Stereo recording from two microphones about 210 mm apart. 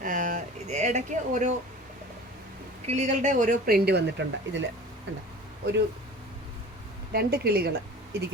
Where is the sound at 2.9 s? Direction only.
35° right (ahead or behind); by 4.7 s 60° right (ahead or behind).